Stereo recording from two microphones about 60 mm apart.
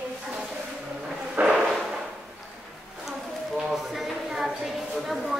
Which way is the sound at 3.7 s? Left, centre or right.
Centre.